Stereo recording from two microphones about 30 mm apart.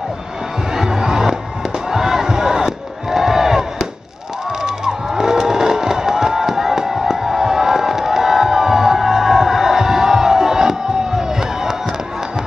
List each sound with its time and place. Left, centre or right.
0.7 s music: centre
1.9 s crowd: centre
4.6 s music: right